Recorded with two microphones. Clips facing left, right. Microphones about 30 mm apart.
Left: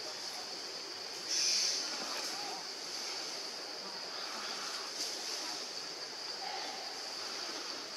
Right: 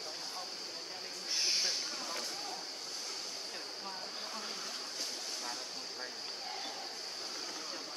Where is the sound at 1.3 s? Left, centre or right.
Right.